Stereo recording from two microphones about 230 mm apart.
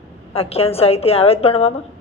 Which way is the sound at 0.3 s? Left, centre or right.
Left.